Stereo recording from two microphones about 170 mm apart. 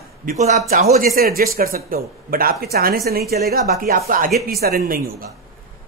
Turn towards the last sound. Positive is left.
turn(degrees=-60)  # may be behind; listen again after turning